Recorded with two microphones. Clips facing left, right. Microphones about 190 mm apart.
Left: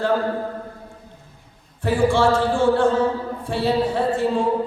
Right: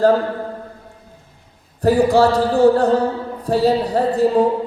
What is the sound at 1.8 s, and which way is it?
Mantra, 40° right (ahead or behind).